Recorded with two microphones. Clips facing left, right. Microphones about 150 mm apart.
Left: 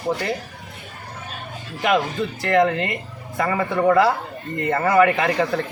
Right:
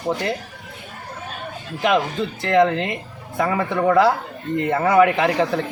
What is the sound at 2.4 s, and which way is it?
Speech, centre (ahead or behind).